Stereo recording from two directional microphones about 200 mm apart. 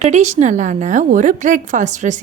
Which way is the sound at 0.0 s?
35° right (ahead or behind).